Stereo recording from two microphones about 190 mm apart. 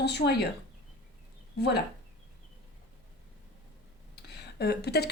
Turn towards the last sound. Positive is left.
turn(degrees=60)  # may be behind; listen again after turning